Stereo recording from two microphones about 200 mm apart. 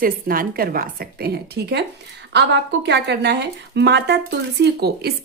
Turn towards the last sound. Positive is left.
turn(degrees=-55)  # may be behind; listen again after turning